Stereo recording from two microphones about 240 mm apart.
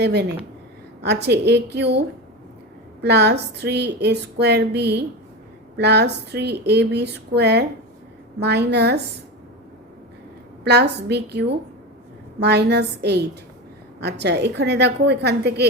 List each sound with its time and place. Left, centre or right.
0.0 s a woman's voice: right
10.6 s a woman's voice: right